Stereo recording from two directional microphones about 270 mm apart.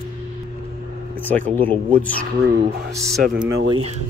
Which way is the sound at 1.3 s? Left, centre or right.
Centre.